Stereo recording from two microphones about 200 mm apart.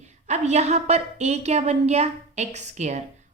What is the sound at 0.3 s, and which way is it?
A woman's voice, 35° right (ahead or behind).